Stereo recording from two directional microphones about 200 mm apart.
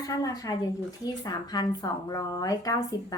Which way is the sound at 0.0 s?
20° left (ahead or behind).